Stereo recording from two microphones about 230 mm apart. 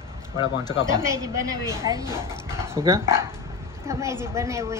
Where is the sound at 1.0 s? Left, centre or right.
Centre.